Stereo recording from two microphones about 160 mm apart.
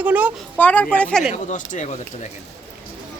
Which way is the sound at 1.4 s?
50° left (ahead or behind).